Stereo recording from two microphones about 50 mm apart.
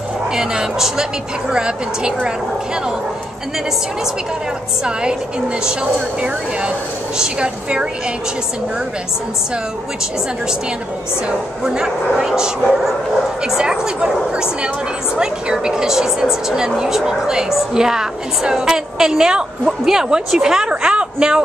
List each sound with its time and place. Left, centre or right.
0.3 s a woman's voice: centre
7.2 s a woman's voice: centre
11.2 s a woman's voice: centre